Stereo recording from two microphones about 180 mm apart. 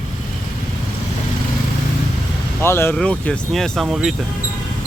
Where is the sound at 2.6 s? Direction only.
15° left (ahead or behind).